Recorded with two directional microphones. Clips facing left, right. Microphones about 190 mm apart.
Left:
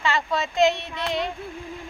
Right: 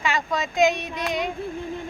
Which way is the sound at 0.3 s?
15° right (ahead or behind).